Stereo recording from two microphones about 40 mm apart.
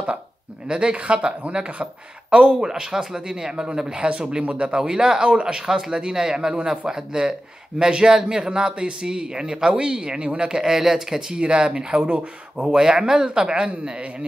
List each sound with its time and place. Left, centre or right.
0.7 s speech: right
2.6 s speech: centre
11.3 s speech: right